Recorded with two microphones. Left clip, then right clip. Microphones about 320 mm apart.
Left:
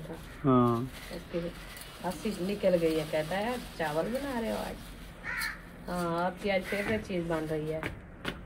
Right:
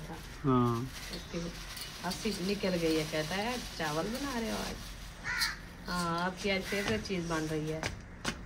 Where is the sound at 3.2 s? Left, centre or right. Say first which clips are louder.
Left 3 dB; right.